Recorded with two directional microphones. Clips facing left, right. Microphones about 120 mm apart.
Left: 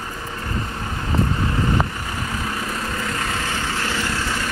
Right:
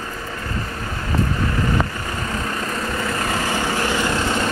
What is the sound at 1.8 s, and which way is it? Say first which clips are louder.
Vehicle: even; 15° left (ahead or behind).